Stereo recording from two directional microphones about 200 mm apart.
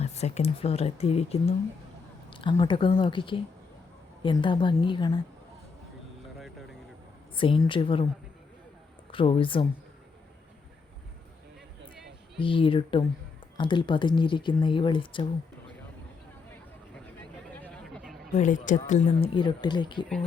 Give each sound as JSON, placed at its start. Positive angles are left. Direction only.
{"t": 0.0, "sound": "speech", "side_deg": 35}
{"t": 7.3, "sound": "speech", "side_deg": 25}
{"t": 9.1, "sound": "speech", "side_deg": 25}
{"t": 12.4, "sound": "speech", "side_deg": 25}
{"t": 17.5, "sound": "a sound", "side_deg": 10}
{"t": 18.3, "sound": "speech", "side_deg": 35}